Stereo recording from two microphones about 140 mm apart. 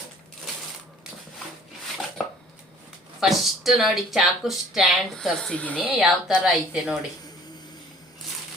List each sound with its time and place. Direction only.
3.2 s speech: centre (ahead or behind)
5.8 s speech: 5° right (ahead or behind)